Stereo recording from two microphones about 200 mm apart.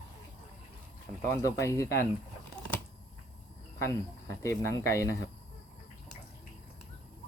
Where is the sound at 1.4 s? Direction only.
15° left (ahead or behind).